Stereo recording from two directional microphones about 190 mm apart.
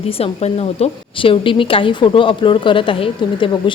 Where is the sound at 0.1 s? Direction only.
30° left (ahead or behind).